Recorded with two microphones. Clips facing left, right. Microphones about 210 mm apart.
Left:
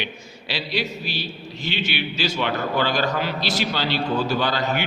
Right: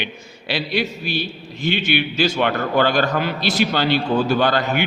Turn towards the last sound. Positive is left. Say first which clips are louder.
# right 4 dB
turn(degrees=-55)  # may be behind; listen again after turning